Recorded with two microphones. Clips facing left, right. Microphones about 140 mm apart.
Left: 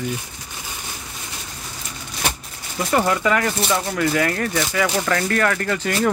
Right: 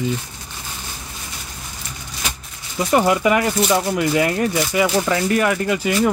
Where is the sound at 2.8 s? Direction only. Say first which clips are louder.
Right 3 dB; 15° right (ahead or behind).